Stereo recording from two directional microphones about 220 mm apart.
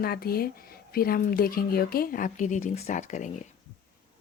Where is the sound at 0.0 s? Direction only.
45° left (ahead or behind).